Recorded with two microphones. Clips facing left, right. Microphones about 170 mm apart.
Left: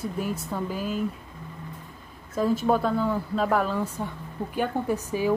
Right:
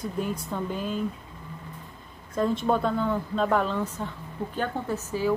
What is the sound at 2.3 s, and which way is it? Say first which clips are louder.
A woman's voice: left 1 dB; 5° left (ahead or behind).